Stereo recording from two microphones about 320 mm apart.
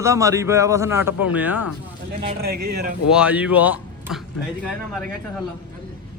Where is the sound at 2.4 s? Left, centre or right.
Right.